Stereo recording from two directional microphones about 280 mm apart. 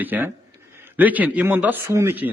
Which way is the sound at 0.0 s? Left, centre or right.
Centre.